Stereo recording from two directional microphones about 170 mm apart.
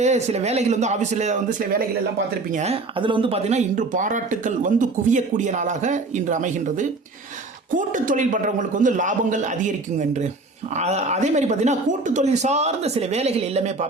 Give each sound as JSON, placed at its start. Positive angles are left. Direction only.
{"t": 0.0, "sound": "speech", "side_deg": -40}
{"t": 3.0, "sound": "speech", "side_deg": -30}